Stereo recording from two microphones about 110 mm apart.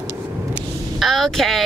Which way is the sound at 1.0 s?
5° left (ahead or behind).